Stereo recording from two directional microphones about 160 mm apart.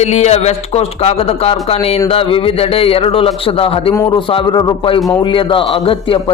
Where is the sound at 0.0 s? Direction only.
45° left (ahead or behind).